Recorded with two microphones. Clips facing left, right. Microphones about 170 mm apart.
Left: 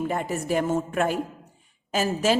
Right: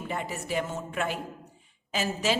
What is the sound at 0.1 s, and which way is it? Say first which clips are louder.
A woman's voice: left 6 dB; 45° left (ahead or behind).